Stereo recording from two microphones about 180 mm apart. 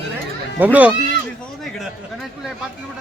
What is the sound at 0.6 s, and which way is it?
Speech, 10° right (ahead or behind).